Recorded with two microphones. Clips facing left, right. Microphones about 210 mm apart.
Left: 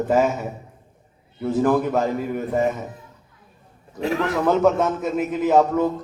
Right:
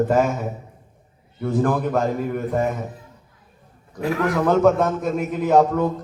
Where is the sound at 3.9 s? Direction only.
25° left (ahead or behind).